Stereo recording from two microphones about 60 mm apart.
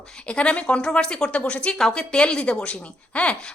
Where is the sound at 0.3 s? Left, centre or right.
Centre.